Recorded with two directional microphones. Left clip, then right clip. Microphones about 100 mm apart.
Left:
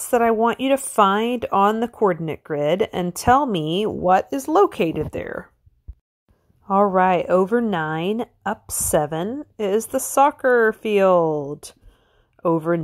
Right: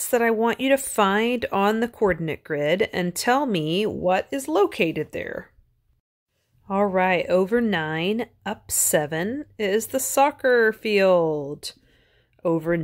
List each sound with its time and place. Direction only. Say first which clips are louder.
0.0 s a woman's voice: left 3 dB; 15° left (ahead or behind)
4.1 s speech: left 7 dB; 45° left (ahead or behind)
4.6 s a woman's voice: left 2 dB; 25° left (ahead or behind)
6.7 s a woman's voice: left 4 dB; 30° left (ahead or behind)